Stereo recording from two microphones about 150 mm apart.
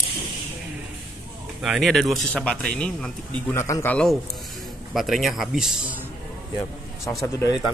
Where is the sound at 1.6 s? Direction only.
Centre (ahead or behind).